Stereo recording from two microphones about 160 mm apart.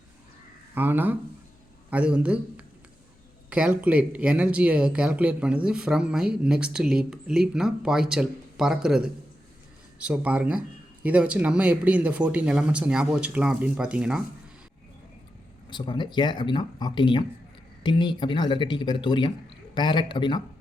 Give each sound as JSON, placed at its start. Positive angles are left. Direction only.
{"t": 0.7, "sound": "a man's voice", "side_deg": -10}
{"t": 15.7, "sound": "speech", "side_deg": 30}